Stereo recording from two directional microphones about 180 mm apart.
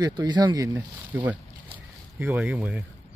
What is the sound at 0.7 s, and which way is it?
Speech, 10° right (ahead or behind).